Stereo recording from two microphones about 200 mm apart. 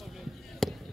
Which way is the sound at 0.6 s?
Centre (ahead or behind).